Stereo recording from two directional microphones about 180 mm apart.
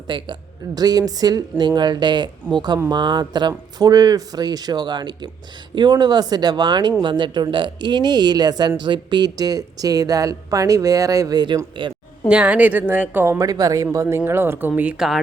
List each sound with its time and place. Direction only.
0.1 s speech: 25° right (ahead or behind)
12.3 s speech: 10° right (ahead or behind)